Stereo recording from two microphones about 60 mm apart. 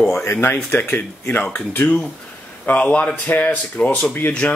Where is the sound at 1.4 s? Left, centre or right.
Left.